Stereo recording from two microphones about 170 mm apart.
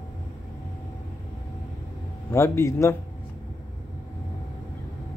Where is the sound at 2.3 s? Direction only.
15° left (ahead or behind).